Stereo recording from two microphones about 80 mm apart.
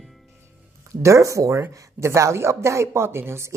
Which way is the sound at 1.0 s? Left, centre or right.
Right.